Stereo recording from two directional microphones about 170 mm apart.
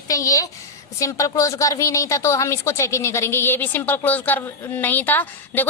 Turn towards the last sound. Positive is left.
turn(degrees=10)  # may be behind; listen again after turning